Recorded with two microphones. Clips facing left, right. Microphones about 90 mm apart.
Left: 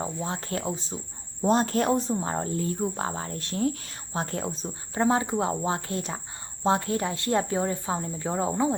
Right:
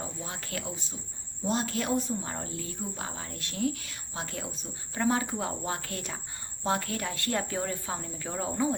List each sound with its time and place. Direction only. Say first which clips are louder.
0.0 s speech: left 8 dB; 30° left (ahead or behind)